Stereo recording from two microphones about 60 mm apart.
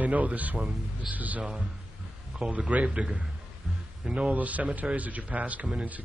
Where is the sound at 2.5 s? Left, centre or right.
Right.